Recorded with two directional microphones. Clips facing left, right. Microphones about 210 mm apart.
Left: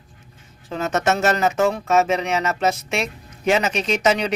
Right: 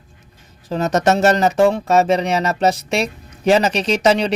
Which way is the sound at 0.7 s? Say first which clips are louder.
Right 5 dB; 35° right (ahead or behind).